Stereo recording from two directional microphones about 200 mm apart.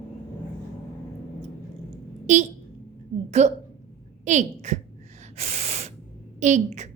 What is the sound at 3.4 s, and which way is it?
A woman's voice, 35° right (ahead or behind).